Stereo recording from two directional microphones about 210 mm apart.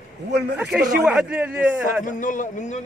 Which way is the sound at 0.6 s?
5° right (ahead or behind).